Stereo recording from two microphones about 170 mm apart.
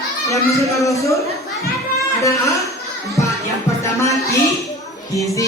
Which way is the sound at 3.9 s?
15° left (ahead or behind).